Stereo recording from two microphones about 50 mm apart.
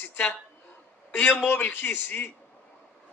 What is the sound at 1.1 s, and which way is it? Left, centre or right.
A man's voice, left.